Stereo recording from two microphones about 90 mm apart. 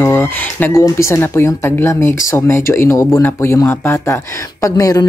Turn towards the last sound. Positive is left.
turn(degrees=40)  # may be behind; listen again after turning